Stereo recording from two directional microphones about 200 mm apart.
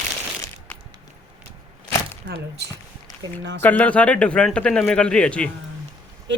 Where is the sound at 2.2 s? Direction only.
55° right (ahead or behind).